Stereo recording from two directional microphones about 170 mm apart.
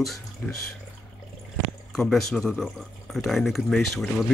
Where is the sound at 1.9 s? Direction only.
Centre (ahead or behind).